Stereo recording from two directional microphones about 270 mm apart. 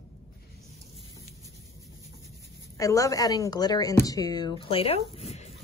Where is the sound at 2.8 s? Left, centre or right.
Centre.